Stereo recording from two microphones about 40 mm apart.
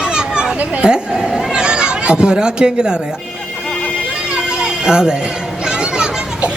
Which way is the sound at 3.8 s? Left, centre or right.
Left.